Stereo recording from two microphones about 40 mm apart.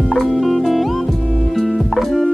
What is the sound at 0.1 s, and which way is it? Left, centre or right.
Music, centre.